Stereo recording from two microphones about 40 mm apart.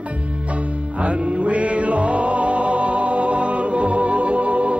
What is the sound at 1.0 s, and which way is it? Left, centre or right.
Music, right.